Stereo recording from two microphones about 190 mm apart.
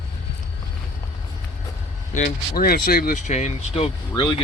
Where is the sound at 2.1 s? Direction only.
45° left (ahead or behind).